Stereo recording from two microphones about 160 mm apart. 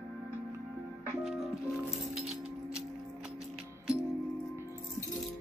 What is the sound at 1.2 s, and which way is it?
Music, 5° right (ahead or behind).